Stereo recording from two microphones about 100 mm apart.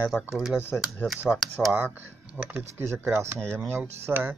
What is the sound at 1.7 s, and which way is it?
Speech, 20° right (ahead or behind).